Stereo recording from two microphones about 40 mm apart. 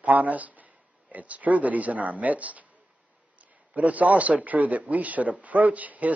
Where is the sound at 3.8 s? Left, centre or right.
Right.